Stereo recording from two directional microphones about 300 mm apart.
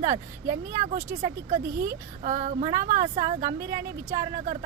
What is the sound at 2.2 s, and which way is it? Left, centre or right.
Speech, right.